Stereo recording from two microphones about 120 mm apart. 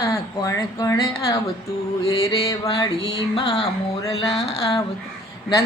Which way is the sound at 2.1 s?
30° left (ahead or behind).